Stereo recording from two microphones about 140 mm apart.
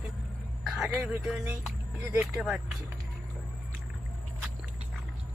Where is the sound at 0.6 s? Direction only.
Centre (ahead or behind).